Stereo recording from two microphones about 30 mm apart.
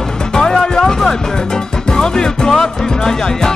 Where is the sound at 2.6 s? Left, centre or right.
Left.